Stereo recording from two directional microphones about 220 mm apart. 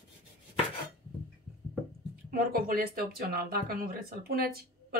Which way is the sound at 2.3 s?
40° right (ahead or behind).